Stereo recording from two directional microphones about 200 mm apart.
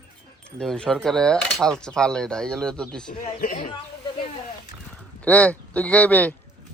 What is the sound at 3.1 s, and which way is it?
Speech, 45° left (ahead or behind).